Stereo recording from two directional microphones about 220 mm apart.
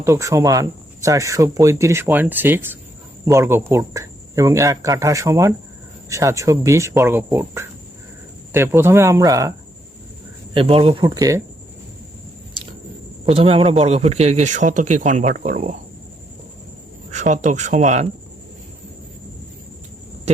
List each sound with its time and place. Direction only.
0.0 s speech: 15° right (ahead or behind)
10.5 s speech: 25° right (ahead or behind)
13.3 s a man's voice: 25° right (ahead or behind)
17.1 s a man's voice: 35° right (ahead or behind)